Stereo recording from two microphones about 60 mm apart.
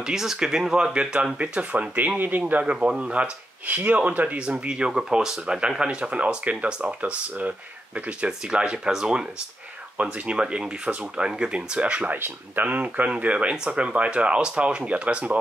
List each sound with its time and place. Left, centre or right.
0.0 s speech: centre; by 2.6 s right
2.6 s speech: centre